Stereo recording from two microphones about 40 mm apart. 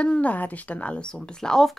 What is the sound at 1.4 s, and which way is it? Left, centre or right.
Speech, centre.